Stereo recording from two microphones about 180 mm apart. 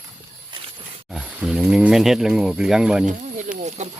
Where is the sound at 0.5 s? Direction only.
25° right (ahead or behind).